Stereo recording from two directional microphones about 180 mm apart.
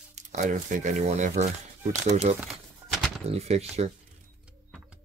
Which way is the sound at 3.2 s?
35° right (ahead or behind).